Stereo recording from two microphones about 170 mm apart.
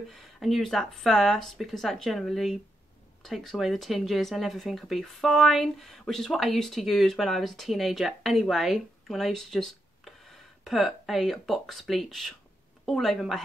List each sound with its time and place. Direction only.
0.1 s speech: centre (ahead or behind)